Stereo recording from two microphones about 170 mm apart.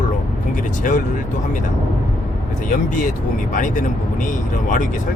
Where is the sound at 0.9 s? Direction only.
50° left (ahead or behind).